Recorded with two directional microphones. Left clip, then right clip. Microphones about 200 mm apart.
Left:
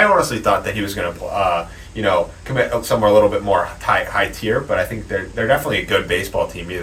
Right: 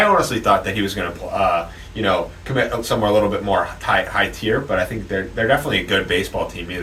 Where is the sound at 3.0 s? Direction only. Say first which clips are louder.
Left 5 dB; 10° left (ahead or behind).